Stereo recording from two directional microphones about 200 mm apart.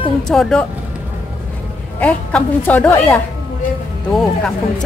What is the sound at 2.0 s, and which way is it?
A woman's voice, 5° left (ahead or behind).